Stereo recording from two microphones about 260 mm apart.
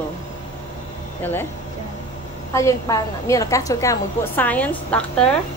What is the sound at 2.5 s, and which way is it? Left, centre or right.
A woman's voice, centre.